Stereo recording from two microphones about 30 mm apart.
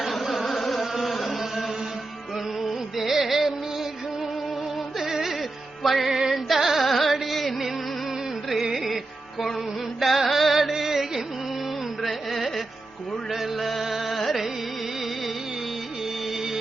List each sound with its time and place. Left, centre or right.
0.1 s carnatic music: centre
2.9 s music: centre
5.0 s music: centre
5.3 s music: centre
6.1 s music: centre
6.3 s carnatic music: centre
6.8 s music: centre
8.7 s music: centre
10.0 s music: centre
10.2 s music: centre
10.8 s music: centre
12.0 s carnatic music: centre
13.3 s music: centre